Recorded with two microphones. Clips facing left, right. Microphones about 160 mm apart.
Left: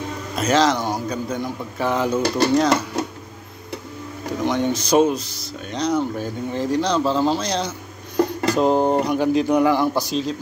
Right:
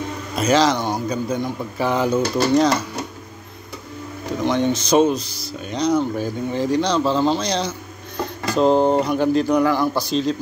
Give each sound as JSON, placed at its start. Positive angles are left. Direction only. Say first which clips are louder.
{"t": 0.4, "sound": "a man's voice", "louder": "right 1 dB", "side_deg": 0}
{"t": 4.5, "sound": "a man's voice", "louder": "right 1 dB", "side_deg": 10}